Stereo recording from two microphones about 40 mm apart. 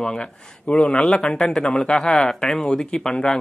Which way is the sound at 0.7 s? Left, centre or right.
Left.